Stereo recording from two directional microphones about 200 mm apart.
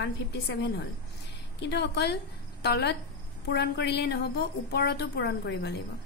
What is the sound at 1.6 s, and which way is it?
A woman's voice, 55° left (ahead or behind).